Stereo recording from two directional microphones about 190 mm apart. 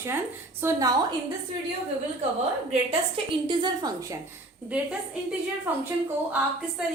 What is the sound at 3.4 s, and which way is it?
Speech, 20° right (ahead or behind).